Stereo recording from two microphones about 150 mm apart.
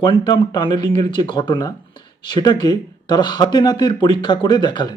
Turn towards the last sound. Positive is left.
turn(degrees=30)  # may be behind; listen again after turning